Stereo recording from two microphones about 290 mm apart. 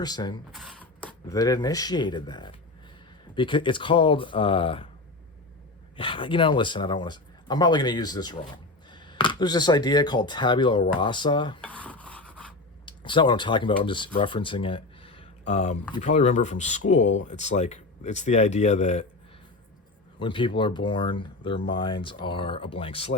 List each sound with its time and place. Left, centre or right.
0.0 s speech: centre
0.5 s speech: centre
6.0 s speech: centre
11.6 s filing: centre
12.8 s speech: centre
17.0 s speech: left
17.2 s speech: left
20.1 s speech: centre